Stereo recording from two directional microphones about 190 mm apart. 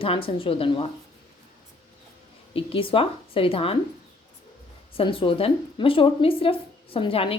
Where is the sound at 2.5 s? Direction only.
30° left (ahead or behind).